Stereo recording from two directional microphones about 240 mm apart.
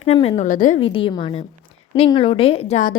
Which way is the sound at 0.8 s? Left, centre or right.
Left.